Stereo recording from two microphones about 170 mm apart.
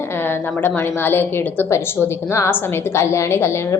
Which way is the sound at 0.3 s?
10° left (ahead or behind).